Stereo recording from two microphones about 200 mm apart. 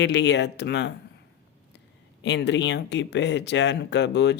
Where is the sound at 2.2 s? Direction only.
60° left (ahead or behind).